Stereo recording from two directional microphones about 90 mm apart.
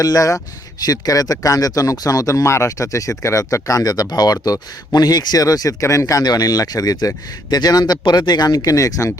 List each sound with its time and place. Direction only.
0.0 s speech: 40° left (ahead or behind)